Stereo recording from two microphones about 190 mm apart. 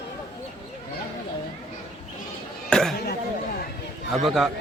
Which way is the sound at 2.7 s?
Centre (ahead or behind).